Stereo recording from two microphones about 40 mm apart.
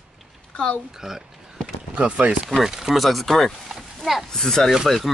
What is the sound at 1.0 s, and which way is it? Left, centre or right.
Speech, centre.